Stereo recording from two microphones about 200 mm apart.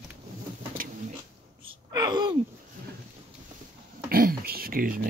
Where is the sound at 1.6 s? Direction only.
25° right (ahead or behind).